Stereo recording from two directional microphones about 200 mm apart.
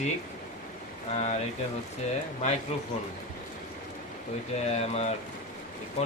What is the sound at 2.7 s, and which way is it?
Mantra, 30° left (ahead or behind).